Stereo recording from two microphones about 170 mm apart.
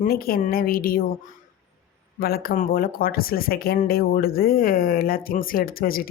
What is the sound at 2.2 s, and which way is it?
Speech, 65° left (ahead or behind).